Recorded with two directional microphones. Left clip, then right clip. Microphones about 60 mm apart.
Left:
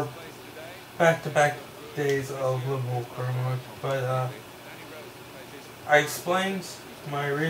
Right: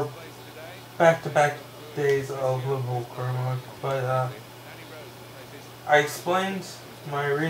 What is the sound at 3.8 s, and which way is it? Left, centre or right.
Speech, centre.